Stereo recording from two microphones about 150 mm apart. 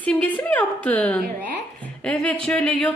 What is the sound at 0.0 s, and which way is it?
A woman's voice, 10° left (ahead or behind).